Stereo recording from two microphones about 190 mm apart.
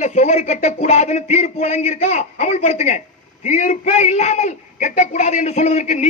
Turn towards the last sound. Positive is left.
turn(degrees=40)  # may be behind; listen again after turning